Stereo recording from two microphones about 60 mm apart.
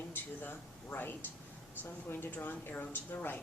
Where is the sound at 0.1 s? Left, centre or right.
Left.